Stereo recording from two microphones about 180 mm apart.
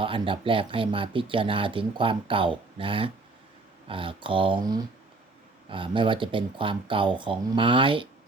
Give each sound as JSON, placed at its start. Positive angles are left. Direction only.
{"t": 0.0, "sound": "speech", "side_deg": -30}